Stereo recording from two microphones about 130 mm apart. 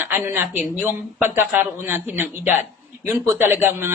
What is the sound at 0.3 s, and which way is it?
Speech, 15° right (ahead or behind).